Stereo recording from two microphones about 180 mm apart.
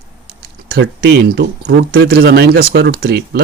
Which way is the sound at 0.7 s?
70° right (ahead or behind).